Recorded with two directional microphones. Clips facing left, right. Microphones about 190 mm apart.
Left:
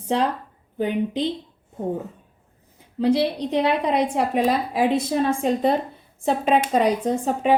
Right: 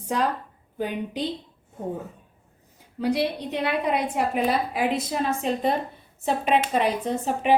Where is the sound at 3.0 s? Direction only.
25° left (ahead or behind).